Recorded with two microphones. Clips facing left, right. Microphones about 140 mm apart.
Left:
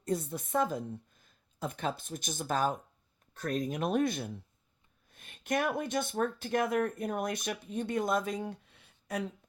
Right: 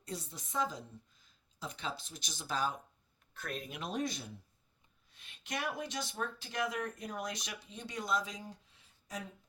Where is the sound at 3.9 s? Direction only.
55° left (ahead or behind).